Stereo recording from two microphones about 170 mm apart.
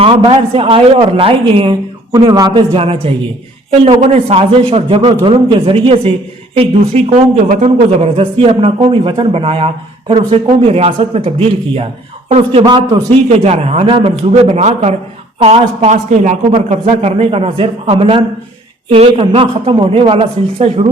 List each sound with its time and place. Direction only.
0.0 s a man's voice: 35° right (ahead or behind)
13.1 s a woman's voice: 40° right (ahead or behind)